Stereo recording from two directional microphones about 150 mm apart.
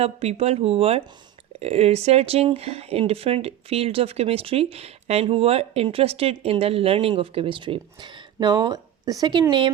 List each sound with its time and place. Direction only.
0.0 s speech: 45° right (ahead or behind)